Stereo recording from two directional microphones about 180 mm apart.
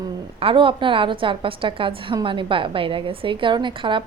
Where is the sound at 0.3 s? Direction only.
30° right (ahead or behind).